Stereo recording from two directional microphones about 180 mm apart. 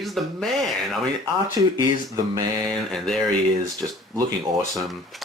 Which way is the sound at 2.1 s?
25° right (ahead or behind).